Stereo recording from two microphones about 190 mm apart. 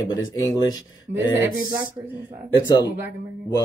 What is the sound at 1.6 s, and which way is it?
Speech, 10° right (ahead or behind).